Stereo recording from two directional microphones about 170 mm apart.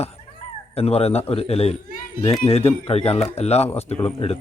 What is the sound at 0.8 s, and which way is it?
Speech, 35° left (ahead or behind).